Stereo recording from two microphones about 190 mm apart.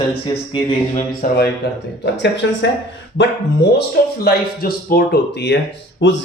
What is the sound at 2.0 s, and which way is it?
Speech, 70° left (ahead or behind).